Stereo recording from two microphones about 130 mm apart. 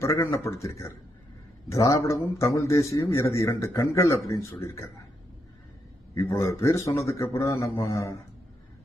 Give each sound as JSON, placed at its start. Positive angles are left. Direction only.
{"t": 0.0, "sound": "a man's voice", "side_deg": 25}
{"t": 6.1, "sound": "a man's voice", "side_deg": 25}